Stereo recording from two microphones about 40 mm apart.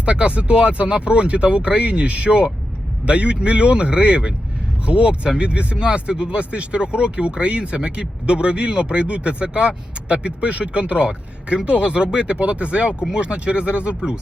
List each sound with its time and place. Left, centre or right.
0.0 s speech: right